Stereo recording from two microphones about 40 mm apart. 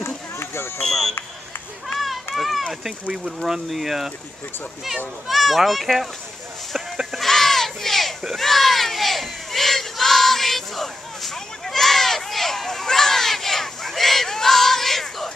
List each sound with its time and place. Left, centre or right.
0.0 s run: left
0.8 s speech: centre
2.3 s run: centre
3.3 s speech: centre
5.3 s speech: centre
7.2 s a sound: centre
8.4 s crowd: centre